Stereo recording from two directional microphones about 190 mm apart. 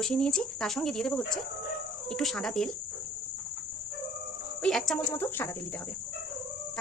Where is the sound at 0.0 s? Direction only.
5° left (ahead or behind).